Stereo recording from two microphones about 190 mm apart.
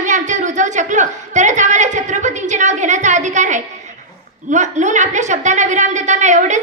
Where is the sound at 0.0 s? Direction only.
40° right (ahead or behind).